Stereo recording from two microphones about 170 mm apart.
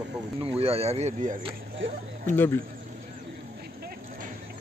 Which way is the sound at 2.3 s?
15° left (ahead or behind).